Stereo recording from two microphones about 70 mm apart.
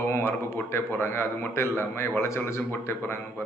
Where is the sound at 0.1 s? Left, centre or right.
Left.